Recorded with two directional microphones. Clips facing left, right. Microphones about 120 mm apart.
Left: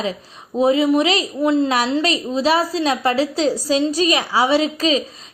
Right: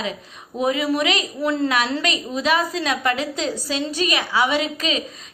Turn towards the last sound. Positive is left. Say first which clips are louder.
# left 6 dB
turn(degrees=30)  # may be behind; listen again after turning